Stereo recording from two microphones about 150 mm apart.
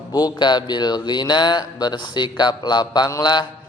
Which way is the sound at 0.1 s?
25° left (ahead or behind).